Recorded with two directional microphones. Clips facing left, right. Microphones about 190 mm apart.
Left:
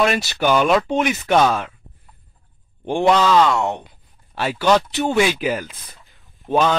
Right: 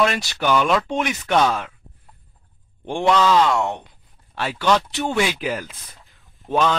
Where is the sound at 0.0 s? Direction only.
5° left (ahead or behind).